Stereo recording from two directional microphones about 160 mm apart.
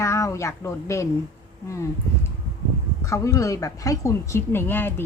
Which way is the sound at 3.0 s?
20° left (ahead or behind).